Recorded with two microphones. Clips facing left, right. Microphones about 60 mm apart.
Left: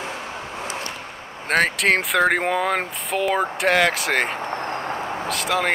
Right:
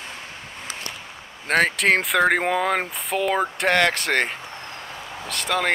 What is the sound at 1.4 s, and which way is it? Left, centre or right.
Speech, centre.